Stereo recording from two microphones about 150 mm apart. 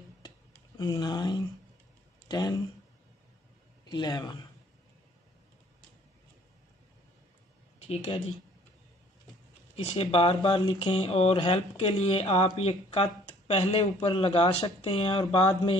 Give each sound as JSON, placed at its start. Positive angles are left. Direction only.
{"t": 0.7, "sound": "speech", "side_deg": 30}
{"t": 3.8, "sound": "speech", "side_deg": 25}
{"t": 7.8, "sound": "speech", "side_deg": 45}
{"t": 9.8, "sound": "speech", "side_deg": 40}